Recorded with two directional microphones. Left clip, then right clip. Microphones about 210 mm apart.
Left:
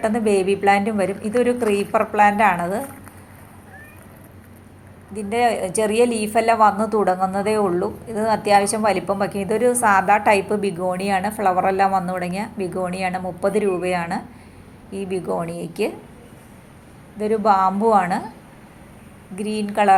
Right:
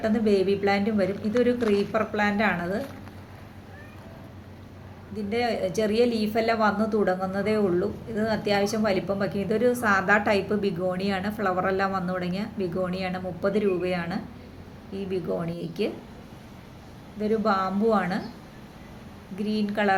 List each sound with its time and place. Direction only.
0.0 s speech: centre (ahead or behind)
5.1 s speech: centre (ahead or behind)
17.2 s speech: centre (ahead or behind)
19.4 s speech: centre (ahead or behind)